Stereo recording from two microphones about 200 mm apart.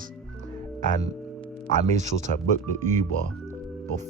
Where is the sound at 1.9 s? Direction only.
35° right (ahead or behind).